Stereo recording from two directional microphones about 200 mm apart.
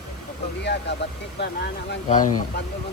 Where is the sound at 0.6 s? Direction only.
60° left (ahead or behind).